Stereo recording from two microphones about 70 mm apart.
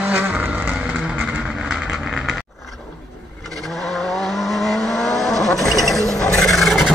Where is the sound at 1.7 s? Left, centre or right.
Centre.